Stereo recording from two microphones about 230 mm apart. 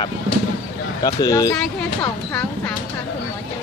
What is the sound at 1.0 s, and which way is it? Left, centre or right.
Speech, centre.